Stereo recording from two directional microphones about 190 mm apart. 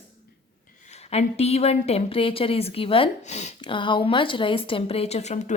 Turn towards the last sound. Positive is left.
turn(degrees=35)  # may be behind; listen again after turning